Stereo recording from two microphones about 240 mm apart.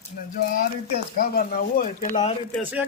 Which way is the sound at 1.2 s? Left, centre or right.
Left.